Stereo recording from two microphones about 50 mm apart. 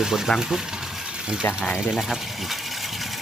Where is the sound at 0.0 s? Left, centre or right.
Centre.